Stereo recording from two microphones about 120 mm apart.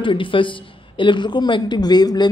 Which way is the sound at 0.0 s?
45° left (ahead or behind).